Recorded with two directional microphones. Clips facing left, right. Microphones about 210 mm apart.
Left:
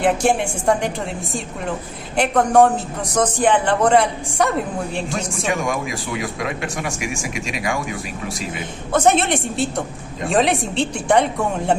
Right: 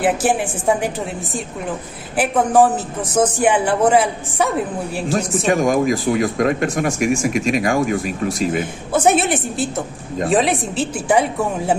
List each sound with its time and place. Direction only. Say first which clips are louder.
0.0 s a man's voice: even; 5° right (ahead or behind)
5.5 s speech: right 8 dB; 40° right (ahead or behind)
8.9 s a man's voice: right 1 dB; 5° right (ahead or behind)